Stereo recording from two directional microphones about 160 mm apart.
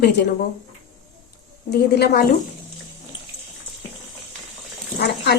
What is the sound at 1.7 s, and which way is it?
Speech, 90° left.